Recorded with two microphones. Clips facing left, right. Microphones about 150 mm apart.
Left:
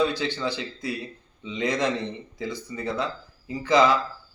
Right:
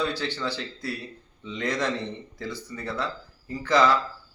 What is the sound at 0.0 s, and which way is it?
A man's voice, 15° left (ahead or behind).